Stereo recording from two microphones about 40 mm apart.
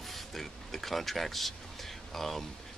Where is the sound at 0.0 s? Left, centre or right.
Centre.